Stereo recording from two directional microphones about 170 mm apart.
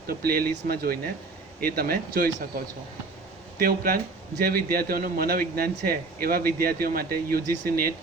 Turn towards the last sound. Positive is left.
turn(degrees=-60)  # may be behind; listen again after turning